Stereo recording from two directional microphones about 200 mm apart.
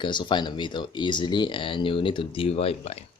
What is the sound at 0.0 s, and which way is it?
Speech, 25° left (ahead or behind).